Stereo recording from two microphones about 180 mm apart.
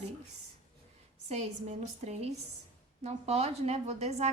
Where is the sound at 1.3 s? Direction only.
40° right (ahead or behind).